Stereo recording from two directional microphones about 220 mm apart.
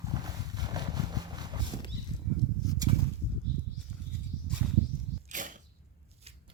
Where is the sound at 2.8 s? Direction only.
15° right (ahead or behind).